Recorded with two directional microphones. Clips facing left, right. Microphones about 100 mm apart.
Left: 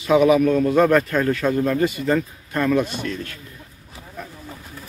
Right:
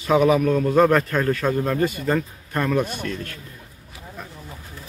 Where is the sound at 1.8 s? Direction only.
40° right (ahead or behind).